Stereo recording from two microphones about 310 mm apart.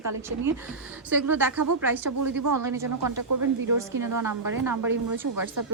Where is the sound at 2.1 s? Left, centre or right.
Right.